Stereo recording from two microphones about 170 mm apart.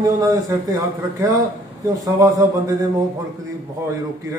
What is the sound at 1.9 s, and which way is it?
Speech, 20° right (ahead or behind).